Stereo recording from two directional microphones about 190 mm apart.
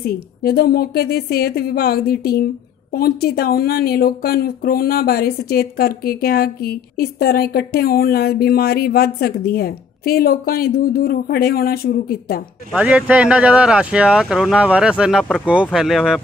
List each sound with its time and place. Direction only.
0.0 s a woman's voice: 55° left (ahead or behind)
12.7 s speech: 5° right (ahead or behind)